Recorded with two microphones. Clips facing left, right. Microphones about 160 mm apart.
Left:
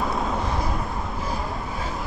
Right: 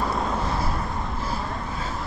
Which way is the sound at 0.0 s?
Centre (ahead or behind).